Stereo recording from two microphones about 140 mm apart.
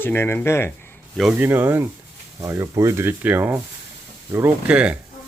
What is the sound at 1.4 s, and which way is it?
Speech, 15° right (ahead or behind).